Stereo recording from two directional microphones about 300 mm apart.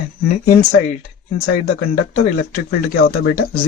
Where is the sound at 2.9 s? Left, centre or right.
Left.